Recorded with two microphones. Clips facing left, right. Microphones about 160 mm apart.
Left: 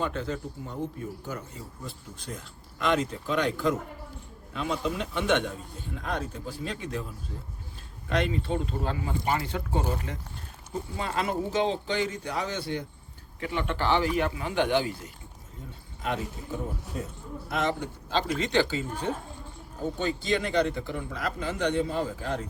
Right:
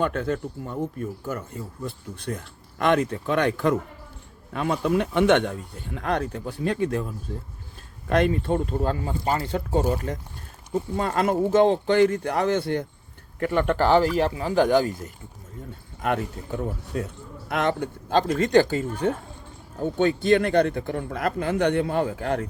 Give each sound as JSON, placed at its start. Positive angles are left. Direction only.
{"t": 0.0, "sound": "speech", "side_deg": -60}
{"t": 8.1, "sound": "speech", "side_deg": -50}
{"t": 16.0, "sound": "speech", "side_deg": -55}